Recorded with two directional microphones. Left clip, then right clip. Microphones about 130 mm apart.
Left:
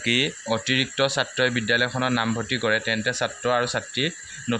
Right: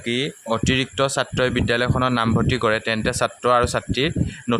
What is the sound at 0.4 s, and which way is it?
A man's voice, 40° right (ahead or behind).